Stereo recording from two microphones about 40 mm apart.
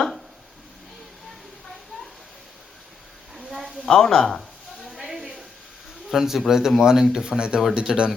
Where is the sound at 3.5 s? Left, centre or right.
Centre.